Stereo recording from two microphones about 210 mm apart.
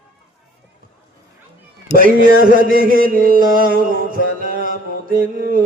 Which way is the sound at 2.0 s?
40° right (ahead or behind).